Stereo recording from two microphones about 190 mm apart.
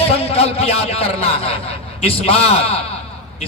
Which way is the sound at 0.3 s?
30° left (ahead or behind).